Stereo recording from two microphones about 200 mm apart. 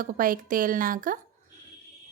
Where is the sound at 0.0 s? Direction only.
45° right (ahead or behind).